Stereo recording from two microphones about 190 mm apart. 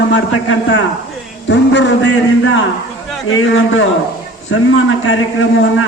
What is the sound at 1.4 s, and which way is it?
A man's voice, 70° left (ahead or behind).